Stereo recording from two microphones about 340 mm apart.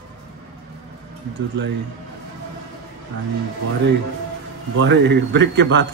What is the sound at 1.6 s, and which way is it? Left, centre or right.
Speech, right.